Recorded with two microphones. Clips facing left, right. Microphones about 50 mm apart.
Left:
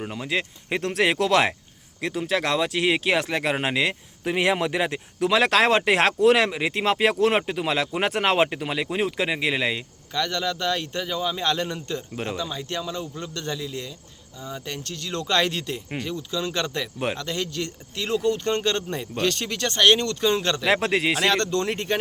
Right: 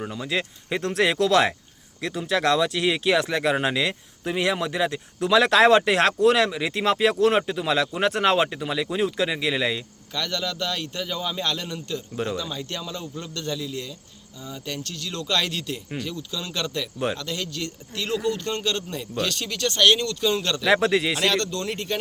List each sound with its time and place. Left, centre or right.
0.3 s speech: centre; by 4.9 s left
5.2 s speech: centre
11.4 s a man's voice: left
12.1 s a man's voice: centre
20.0 s speech: left
20.3 s a man's voice: left
20.7 s speech: centre
21.2 s speech: left